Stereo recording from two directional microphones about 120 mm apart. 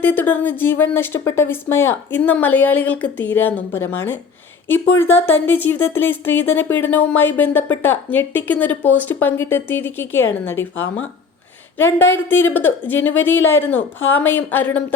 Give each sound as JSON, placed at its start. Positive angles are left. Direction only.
{"t": 0.0, "sound": "speech", "side_deg": 15}